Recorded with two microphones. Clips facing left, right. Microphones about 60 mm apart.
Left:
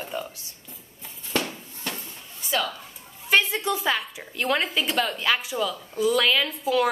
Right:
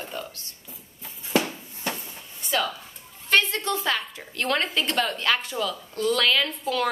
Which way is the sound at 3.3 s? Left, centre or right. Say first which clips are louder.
Left 1 dB; centre.